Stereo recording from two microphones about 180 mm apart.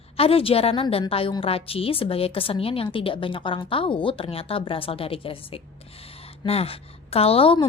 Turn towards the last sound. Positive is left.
turn(degrees=30)  # may be behind; listen again after turning